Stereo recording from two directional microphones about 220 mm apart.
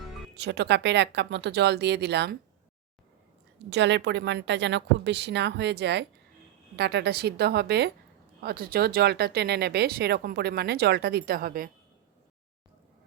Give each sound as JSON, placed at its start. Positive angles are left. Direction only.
{"t": 0.3, "sound": "speech", "side_deg": -50}
{"t": 3.7, "sound": "speech", "side_deg": -55}